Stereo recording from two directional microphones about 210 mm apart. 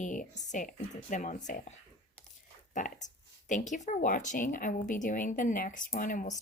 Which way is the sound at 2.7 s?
40° left (ahead or behind).